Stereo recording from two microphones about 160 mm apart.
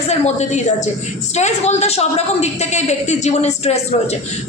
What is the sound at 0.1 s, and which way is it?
A man's voice, 45° left (ahead or behind).